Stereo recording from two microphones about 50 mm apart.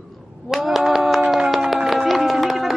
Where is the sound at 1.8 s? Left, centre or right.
Centre.